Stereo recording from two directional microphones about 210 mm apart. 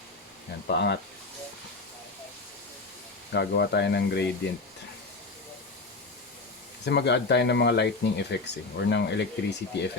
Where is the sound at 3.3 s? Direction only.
55° left (ahead or behind).